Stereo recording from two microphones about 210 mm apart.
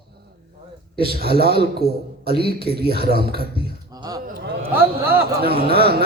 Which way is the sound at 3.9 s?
20° right (ahead or behind).